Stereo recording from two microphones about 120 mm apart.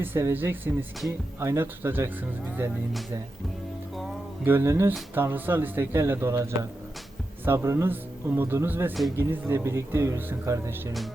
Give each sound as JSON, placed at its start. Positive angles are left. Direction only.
{"t": 0.0, "sound": "speech", "side_deg": -20}
{"t": 4.4, "sound": "speech", "side_deg": -20}